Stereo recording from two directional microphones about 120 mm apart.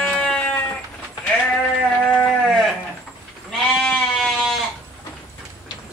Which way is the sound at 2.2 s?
5° left (ahead or behind).